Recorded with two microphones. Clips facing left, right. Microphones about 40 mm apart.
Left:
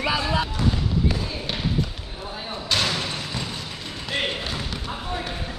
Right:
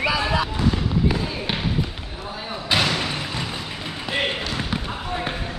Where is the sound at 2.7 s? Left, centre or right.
Centre.